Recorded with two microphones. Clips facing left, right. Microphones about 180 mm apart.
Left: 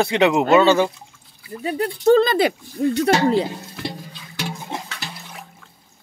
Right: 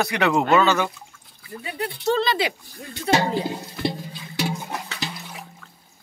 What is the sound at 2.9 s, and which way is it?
Speech, 75° left (ahead or behind).